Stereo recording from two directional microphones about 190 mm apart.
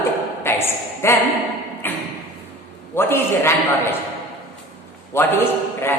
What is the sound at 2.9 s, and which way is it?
Speech, 10° left (ahead or behind).